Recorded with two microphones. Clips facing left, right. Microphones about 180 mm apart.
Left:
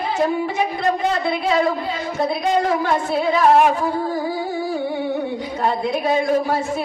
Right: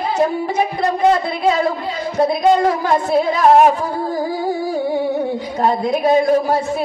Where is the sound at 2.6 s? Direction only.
40° right (ahead or behind).